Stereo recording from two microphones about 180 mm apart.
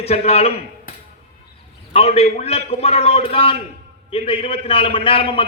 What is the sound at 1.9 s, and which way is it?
A man's voice, 35° left (ahead or behind).